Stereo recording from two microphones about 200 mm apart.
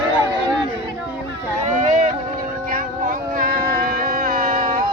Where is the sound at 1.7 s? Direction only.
40° right (ahead or behind).